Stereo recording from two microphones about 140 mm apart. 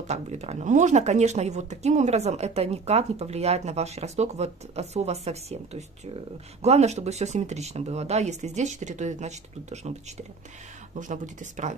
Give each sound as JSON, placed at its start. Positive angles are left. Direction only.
{"t": 0.0, "sound": "speech", "side_deg": -50}
{"t": 11.0, "sound": "speech", "side_deg": -65}